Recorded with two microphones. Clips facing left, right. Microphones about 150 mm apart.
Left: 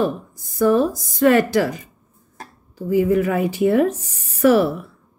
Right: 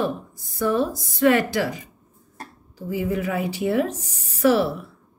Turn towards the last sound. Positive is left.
turn(degrees=50)  # may be behind; listen again after turning